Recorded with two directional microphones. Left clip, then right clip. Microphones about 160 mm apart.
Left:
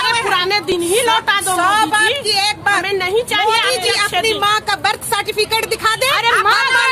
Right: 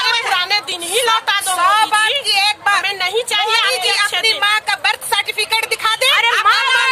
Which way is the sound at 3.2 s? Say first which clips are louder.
Even; 35° right (ahead or behind).